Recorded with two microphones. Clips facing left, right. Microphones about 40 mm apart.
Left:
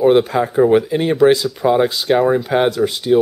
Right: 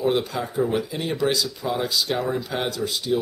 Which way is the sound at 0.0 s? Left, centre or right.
Left.